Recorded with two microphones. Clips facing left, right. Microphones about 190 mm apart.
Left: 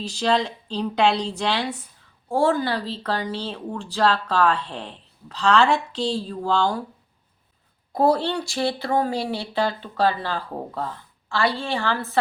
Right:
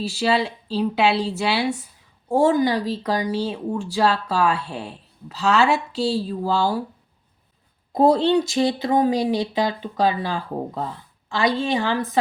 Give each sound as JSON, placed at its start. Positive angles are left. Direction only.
{"t": 0.0, "sound": "a woman's voice", "side_deg": -5}
{"t": 7.9, "sound": "speech", "side_deg": -20}